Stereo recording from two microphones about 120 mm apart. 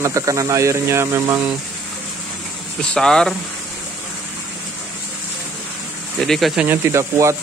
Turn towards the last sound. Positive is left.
turn(degrees=-25)  # may be behind; listen again after turning